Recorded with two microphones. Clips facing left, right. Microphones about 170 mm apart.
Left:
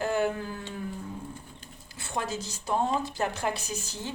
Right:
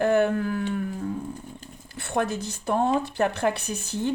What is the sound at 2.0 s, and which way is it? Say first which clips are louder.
Speech: right 6 dB; 60° right (ahead or behind).